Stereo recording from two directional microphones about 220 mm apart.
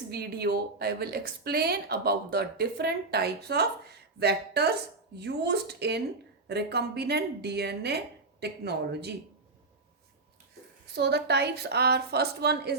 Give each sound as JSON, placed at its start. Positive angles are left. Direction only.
{"t": 0.1, "sound": "speech", "side_deg": -45}
{"t": 10.9, "sound": "speech", "side_deg": -50}